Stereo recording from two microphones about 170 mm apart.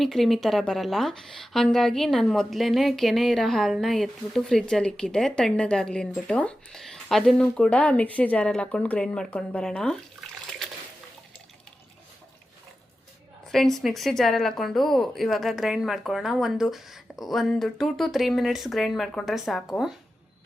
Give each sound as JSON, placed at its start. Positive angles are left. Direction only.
{"t": 0.0, "sound": "a woman's voice", "side_deg": 0}
{"t": 13.5, "sound": "a woman's voice", "side_deg": 0}